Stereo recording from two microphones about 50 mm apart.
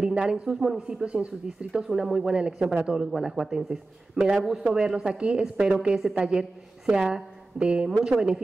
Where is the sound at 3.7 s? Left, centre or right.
Right.